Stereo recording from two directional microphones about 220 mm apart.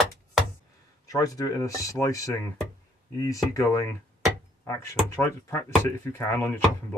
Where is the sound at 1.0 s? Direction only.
15° left (ahead or behind).